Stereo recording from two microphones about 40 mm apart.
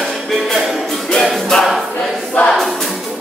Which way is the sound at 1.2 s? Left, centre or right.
Centre.